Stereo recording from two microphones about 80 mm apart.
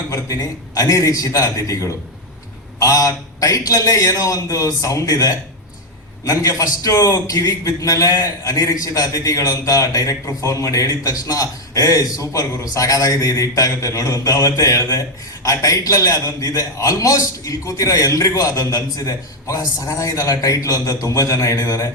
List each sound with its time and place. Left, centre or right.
0.1 s a man's voice: left